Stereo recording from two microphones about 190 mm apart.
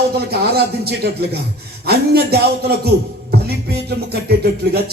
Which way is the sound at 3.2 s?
55° right (ahead or behind).